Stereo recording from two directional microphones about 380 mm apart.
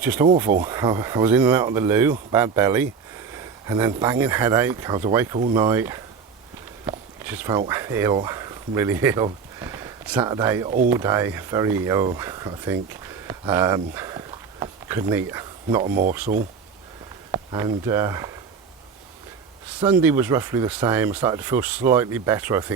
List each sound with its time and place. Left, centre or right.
0.0 s speech: centre
15.9 s speech: right
17.3 s speech: centre
19.8 s speech: centre